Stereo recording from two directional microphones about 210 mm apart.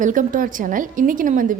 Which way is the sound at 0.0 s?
40° right (ahead or behind).